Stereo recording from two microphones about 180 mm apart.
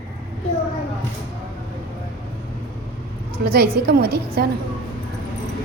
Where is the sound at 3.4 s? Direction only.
60° right (ahead or behind).